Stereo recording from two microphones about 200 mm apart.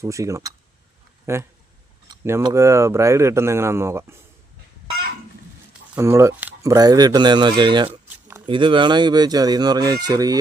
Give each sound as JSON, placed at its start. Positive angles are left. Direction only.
{"t": 0.0, "sound": "speech", "side_deg": -15}
{"t": 5.9, "sound": "speech", "side_deg": -15}